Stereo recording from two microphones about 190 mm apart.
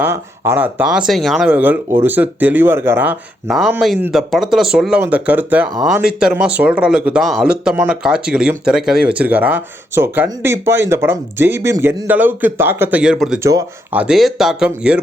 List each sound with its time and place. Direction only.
0.0 s speech: 10° right (ahead or behind)
13.4 s speech: 15° right (ahead or behind)
14.0 s speech: centre (ahead or behind)